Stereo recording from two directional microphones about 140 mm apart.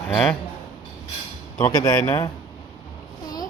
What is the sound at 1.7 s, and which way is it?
Speech, 30° left (ahead or behind).